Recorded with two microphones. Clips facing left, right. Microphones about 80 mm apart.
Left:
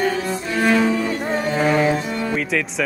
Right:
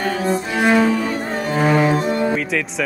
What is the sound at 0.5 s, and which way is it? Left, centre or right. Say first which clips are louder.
Cello: right 1 dB; centre.